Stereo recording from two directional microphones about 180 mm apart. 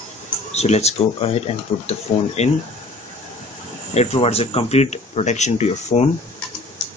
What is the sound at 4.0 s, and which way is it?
Speech, 35° left (ahead or behind).